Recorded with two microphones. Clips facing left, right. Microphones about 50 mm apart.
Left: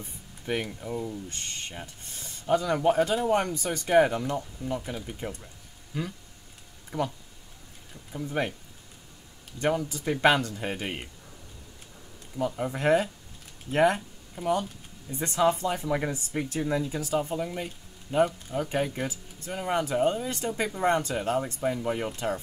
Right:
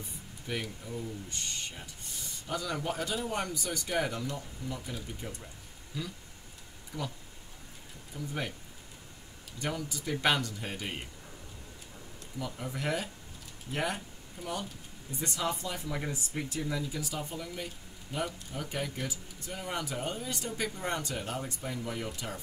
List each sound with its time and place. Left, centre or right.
0.0 s speech: left
9.6 s speech: left
12.4 s speech: left